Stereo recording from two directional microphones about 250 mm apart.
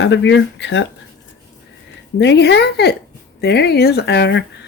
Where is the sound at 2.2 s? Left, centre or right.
Left.